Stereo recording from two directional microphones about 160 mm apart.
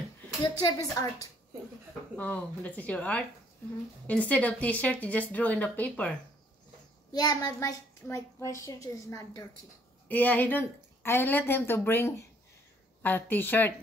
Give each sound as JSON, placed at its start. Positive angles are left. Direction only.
{"t": 0.4, "sound": "a child's voice", "side_deg": 20}
{"t": 2.1, "sound": "speech", "side_deg": 10}
{"t": 7.1, "sound": "a child's voice", "side_deg": 25}